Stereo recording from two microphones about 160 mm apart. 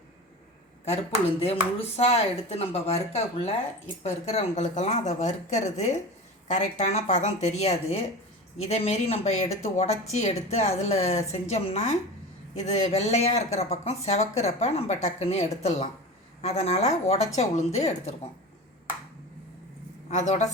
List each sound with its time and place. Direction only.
1.4 s speech: 40° left (ahead or behind)
20.1 s a woman's voice: 50° left (ahead or behind)